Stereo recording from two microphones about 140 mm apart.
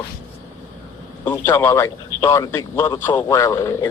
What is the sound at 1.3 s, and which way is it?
A man's voice, 20° left (ahead or behind).